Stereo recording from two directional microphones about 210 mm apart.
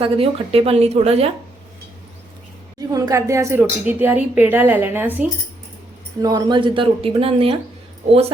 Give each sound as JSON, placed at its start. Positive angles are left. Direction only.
{"t": 0.0, "sound": "speech", "side_deg": -25}
{"t": 2.7, "sound": "speech", "side_deg": -15}
{"t": 6.2, "sound": "speech", "side_deg": -20}